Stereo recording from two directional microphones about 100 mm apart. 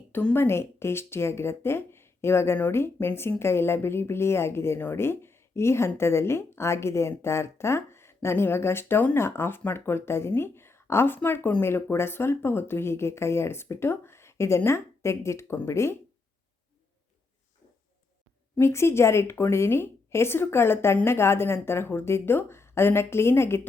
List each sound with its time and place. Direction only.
0.1 s a woman's voice: 10° left (ahead or behind)
0.3 s speech: 25° left (ahead or behind)
18.6 s speech: 25° left (ahead or behind)